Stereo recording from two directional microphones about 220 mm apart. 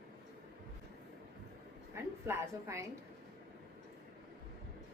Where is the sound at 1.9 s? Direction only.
10° right (ahead or behind).